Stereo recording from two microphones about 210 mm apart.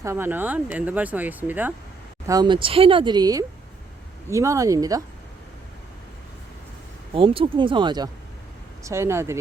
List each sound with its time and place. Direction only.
0.0 s speech: 10° right (ahead or behind)
2.2 s speech: 20° right (ahead or behind)
7.1 s speech: 25° right (ahead or behind)